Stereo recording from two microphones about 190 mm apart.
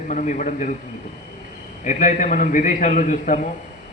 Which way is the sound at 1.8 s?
40° left (ahead or behind).